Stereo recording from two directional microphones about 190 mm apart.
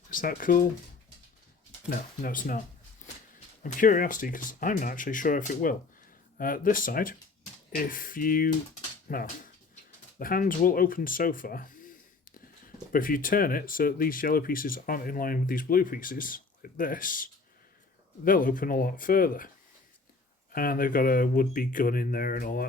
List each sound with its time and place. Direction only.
0.1 s speech: 45° left (ahead or behind)
1.9 s speech: 45° left (ahead or behind)
3.6 s speech: 45° left (ahead or behind)
18.3 s speech: 45° left (ahead or behind)
20.5 s speech: 50° left (ahead or behind)